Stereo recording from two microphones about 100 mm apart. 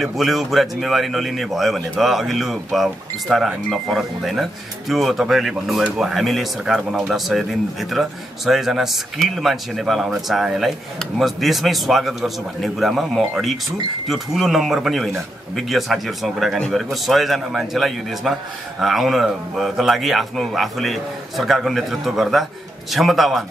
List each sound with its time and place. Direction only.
0.0 s a man's voice: centre (ahead or behind)